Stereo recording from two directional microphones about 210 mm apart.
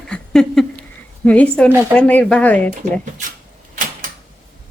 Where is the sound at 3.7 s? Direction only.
40° right (ahead or behind).